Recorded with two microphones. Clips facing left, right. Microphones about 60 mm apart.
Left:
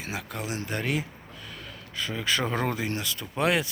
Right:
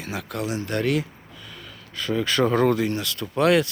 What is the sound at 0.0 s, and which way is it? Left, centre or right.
Speech, centre.